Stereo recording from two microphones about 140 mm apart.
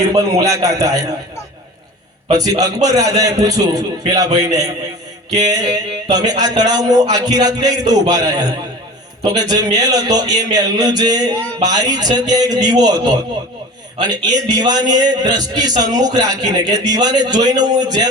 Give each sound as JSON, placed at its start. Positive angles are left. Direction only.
{"t": 0.0, "sound": "speech", "side_deg": -25}
{"t": 2.3, "sound": "speech", "side_deg": -25}
{"t": 14.4, "sound": "speech", "side_deg": -30}